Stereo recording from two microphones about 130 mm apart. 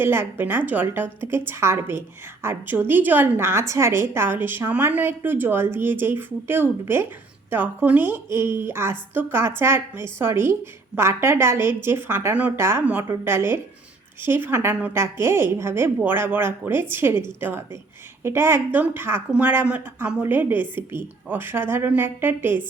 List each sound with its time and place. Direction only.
0.0 s a woman's voice: 15° right (ahead or behind)